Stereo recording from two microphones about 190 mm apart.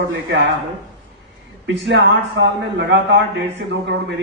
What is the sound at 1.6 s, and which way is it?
A man's voice, 70° right (ahead or behind).